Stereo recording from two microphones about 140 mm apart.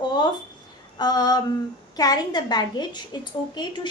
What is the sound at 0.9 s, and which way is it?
Female singing, 30° left (ahead or behind).